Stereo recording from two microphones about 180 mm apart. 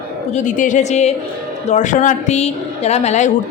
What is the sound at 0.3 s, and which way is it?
A woman's voice, 45° left (ahead or behind).